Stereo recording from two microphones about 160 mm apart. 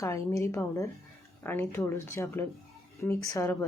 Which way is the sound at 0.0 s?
20° left (ahead or behind).